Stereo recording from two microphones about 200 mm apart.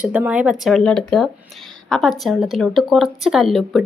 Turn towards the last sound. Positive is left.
turn(degrees=0)  # may be behind; listen again after turning